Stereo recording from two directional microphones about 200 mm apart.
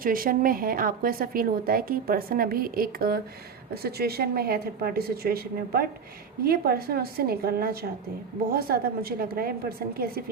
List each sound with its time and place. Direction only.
0.0 s speech: 45° right (ahead or behind)